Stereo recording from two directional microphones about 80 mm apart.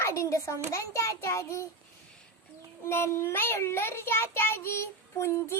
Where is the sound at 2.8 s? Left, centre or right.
Left.